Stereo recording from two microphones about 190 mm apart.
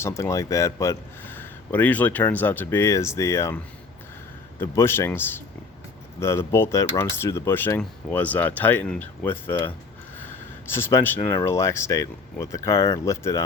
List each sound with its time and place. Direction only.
0.0 s speech: 15° left (ahead or behind)
4.6 s speech: 15° left (ahead or behind)
10.8 s speech: 15° left (ahead or behind)